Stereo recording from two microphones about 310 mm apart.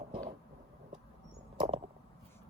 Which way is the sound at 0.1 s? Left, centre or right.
Centre.